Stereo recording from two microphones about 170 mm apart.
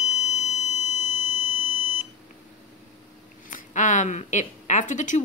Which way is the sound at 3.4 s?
50° left (ahead or behind).